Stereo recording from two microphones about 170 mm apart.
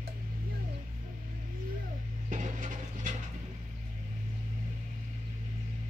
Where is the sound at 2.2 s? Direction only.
50° right (ahead or behind).